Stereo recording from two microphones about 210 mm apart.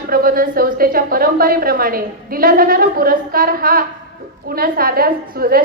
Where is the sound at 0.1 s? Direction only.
45° right (ahead or behind).